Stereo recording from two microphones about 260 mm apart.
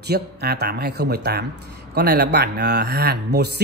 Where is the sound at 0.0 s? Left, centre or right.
Right.